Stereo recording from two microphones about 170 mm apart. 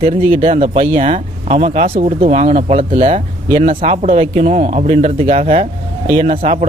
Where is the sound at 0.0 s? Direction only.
35° right (ahead or behind).